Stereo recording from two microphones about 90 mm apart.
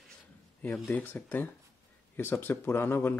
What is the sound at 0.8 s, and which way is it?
Speech, 20° left (ahead or behind).